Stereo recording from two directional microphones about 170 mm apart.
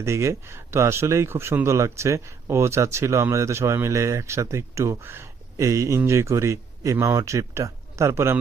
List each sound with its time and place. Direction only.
0.0 s speech: 15° right (ahead or behind)